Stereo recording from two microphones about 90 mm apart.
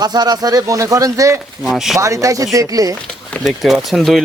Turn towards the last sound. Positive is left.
turn(degrees=0)  # may be behind; listen again after turning